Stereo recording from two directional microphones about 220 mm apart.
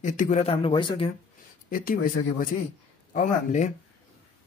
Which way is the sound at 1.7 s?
40° left (ahead or behind).